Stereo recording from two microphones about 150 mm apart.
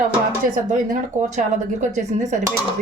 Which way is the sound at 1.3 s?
55° right (ahead or behind).